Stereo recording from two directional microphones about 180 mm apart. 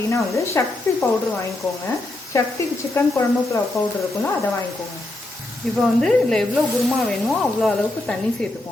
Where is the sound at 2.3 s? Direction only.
15° left (ahead or behind).